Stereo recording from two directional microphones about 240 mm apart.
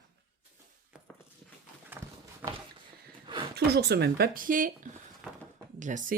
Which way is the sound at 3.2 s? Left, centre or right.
Right.